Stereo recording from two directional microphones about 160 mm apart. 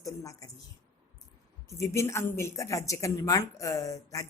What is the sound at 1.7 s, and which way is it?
A woman's voice, 20° left (ahead or behind).